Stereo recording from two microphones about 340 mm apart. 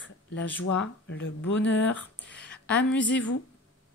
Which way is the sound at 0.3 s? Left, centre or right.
Left.